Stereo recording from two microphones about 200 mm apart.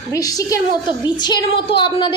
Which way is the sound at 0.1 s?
15° left (ahead or behind).